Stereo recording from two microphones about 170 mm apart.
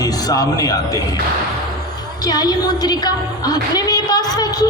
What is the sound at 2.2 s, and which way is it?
A woman's voice, 25° left (ahead or behind).